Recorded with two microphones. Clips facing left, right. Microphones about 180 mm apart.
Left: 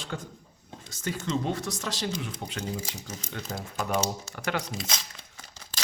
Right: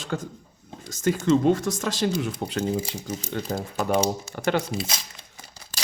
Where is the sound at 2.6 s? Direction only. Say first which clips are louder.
Right 8 dB; 30° right (ahead or behind).